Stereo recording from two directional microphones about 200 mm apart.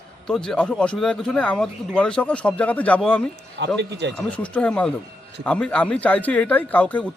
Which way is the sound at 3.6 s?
60° right (ahead or behind).